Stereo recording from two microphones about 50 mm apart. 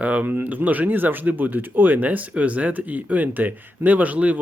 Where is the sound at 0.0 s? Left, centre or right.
Right.